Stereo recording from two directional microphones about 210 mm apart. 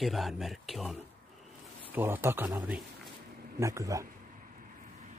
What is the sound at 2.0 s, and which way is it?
Speech, 10° right (ahead or behind).